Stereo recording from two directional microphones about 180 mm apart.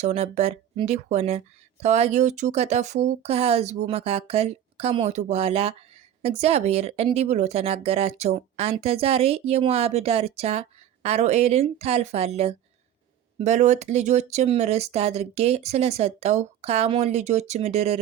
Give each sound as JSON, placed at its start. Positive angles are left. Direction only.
{"t": 0.0, "sound": "speech", "side_deg": -40}